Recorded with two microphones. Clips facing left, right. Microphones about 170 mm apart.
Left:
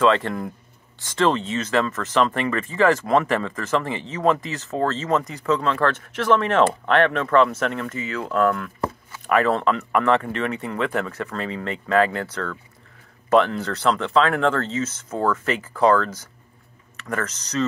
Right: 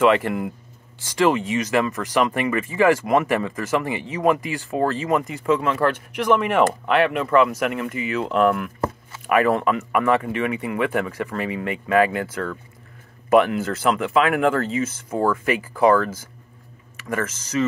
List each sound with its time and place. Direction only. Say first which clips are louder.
0.0 s speech: right 1 dB; 15° right (ahead or behind)
17.1 s speech: right 2 dB; 15° right (ahead or behind)